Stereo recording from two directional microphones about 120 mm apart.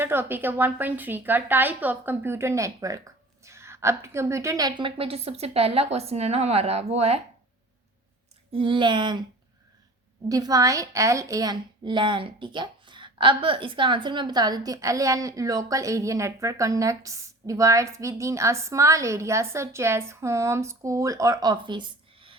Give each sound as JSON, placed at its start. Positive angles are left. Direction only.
{"t": 0.0, "sound": "a woman's voice", "side_deg": -20}
{"t": 4.7, "sound": "speech", "side_deg": -45}
{"t": 8.5, "sound": "speech", "side_deg": -45}
{"t": 10.2, "sound": "a woman's voice", "side_deg": -30}